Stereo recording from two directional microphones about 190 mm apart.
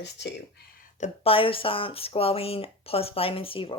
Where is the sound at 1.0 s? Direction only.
30° left (ahead or behind).